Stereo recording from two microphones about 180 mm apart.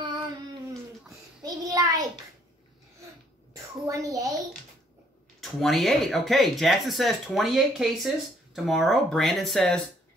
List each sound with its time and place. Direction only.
1.4 s child singing: 20° right (ahead or behind)
3.5 s a woman's voice: 15° right (ahead or behind)
5.4 s speech: centre (ahead or behind)